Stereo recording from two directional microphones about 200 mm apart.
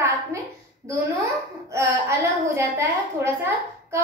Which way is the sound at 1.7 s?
15° right (ahead or behind).